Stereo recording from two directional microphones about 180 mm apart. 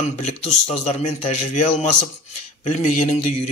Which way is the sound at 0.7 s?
40° left (ahead or behind).